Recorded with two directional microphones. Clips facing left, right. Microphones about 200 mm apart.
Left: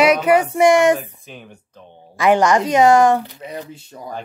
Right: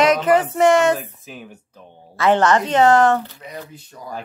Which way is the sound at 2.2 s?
10° left (ahead or behind).